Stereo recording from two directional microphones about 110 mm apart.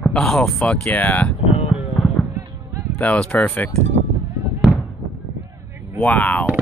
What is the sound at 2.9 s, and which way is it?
Speech, 10° left (ahead or behind).